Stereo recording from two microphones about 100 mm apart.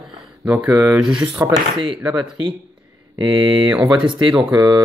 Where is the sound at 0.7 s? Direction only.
20° right (ahead or behind).